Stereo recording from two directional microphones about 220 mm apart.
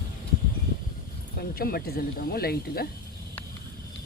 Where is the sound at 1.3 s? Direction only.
40° left (ahead or behind).